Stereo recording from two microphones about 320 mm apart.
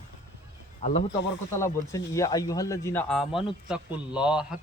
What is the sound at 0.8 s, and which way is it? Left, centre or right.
Speech, left.